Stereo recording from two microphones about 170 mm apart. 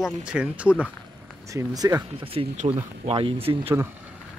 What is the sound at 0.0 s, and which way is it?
Speech, 5° right (ahead or behind).